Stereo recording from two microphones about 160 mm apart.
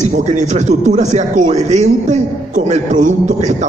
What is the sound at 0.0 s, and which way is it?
A man's voice, 50° right (ahead or behind).